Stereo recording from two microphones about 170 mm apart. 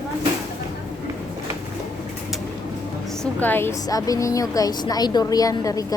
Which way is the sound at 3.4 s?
10° left (ahead or behind).